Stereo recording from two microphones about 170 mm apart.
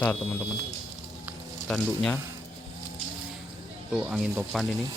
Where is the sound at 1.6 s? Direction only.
Centre (ahead or behind).